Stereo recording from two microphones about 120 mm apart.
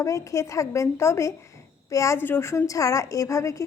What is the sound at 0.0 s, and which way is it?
A woman's voice, 25° left (ahead or behind).